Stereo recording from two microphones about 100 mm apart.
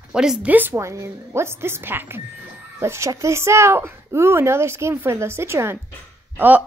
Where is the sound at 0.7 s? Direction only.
30° right (ahead or behind).